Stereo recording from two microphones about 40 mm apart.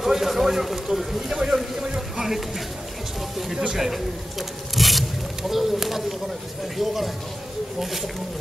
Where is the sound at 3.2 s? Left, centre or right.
Centre.